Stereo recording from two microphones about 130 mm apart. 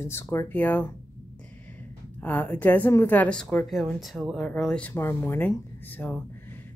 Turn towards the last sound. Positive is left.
turn(degrees=15)  # may be behind; listen again after turning